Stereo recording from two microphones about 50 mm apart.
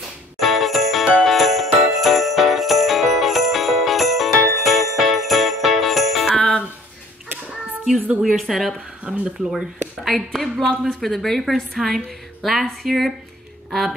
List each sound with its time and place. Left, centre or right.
0.4 s music: centre
1.2 s jingle bell: centre
6.3 s music: centre
8.2 s a woman's voice: centre
11.1 s a woman's voice: centre